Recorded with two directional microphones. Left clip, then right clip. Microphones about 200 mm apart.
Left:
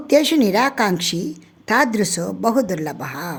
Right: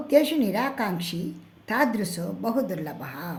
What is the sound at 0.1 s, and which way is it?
A woman's voice, 45° left (ahead or behind).